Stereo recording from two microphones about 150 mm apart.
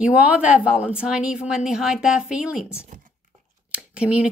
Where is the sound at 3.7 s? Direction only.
5° right (ahead or behind).